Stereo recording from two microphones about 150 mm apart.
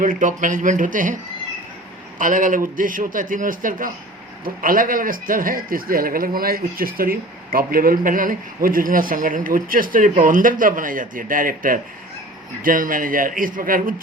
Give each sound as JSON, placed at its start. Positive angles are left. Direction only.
{"t": 0.0, "sound": "speech", "side_deg": -60}